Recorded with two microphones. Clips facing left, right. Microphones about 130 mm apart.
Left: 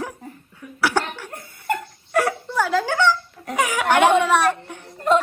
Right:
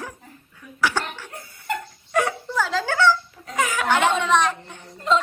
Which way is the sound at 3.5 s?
10° left (ahead or behind).